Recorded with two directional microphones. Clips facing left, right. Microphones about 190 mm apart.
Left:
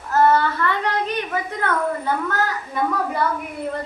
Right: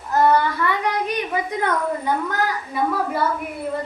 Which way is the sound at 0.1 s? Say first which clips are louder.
Even; 15° right (ahead or behind).